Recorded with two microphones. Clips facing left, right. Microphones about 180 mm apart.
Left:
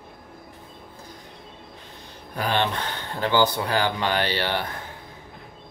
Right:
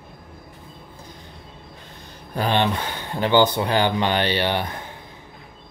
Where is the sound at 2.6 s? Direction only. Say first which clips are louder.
Right 3 dB; 10° right (ahead or behind).